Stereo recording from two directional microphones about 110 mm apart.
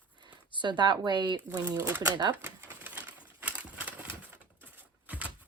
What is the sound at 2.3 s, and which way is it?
Typewriter, 20° right (ahead or behind).